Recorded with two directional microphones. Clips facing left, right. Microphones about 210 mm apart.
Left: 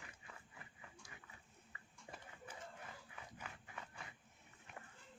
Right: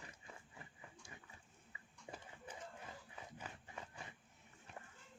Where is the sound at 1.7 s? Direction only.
25° right (ahead or behind).